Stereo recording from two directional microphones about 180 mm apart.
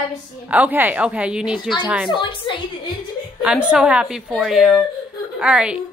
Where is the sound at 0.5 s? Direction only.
10° right (ahead or behind).